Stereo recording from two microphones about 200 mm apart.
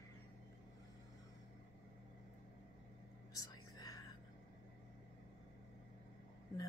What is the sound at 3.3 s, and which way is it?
Whispering, 20° left (ahead or behind).